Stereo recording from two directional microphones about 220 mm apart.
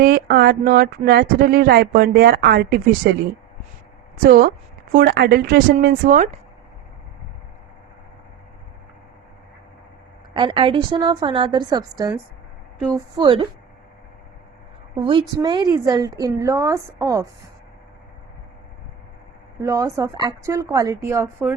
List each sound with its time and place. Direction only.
0.0 s speech: 45° right (ahead or behind)
10.3 s a woman's voice: 25° right (ahead or behind)
14.9 s a woman's voice: 20° right (ahead or behind)
19.6 s speech: 15° right (ahead or behind)